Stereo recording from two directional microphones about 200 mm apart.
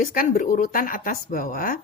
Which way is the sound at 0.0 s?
45° left (ahead or behind).